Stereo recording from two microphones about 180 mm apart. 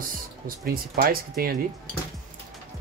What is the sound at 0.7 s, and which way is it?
Speech, 55° right (ahead or behind).